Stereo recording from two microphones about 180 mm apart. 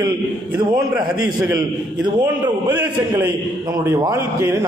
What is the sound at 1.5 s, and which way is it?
A man's voice, 25° right (ahead or behind).